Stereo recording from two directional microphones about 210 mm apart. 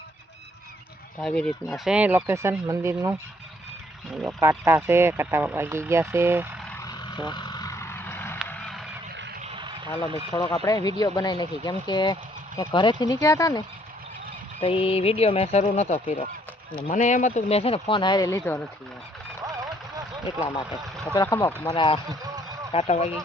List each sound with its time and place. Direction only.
1.2 s speech: 5° left (ahead or behind); by 3.2 s 15° right (ahead or behind)
4.1 s speech: centre (ahead or behind)
4.4 s speech: 15° right (ahead or behind)
6.7 s vehicle: 15° left (ahead or behind)
8.4 s a sound: 5° left (ahead or behind)
9.4 s a sound: 25° right (ahead or behind)
10.1 s speech: 25° right (ahead or behind)
10.5 s speech: 15° left (ahead or behind)
20.8 s vehicle: centre (ahead or behind)
21.2 s speech: 15° left (ahead or behind)